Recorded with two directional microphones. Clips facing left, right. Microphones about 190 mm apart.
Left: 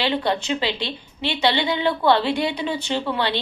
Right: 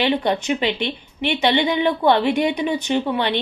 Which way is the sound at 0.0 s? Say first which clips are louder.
Right 3 dB; 20° right (ahead or behind).